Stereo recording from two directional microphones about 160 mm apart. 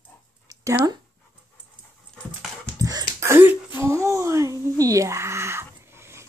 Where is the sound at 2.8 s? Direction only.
20° right (ahead or behind).